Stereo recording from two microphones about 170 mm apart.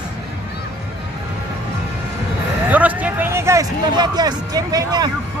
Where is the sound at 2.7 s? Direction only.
10° right (ahead or behind).